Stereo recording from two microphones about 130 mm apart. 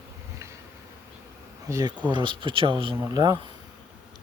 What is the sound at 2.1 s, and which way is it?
Speech, 35° right (ahead or behind).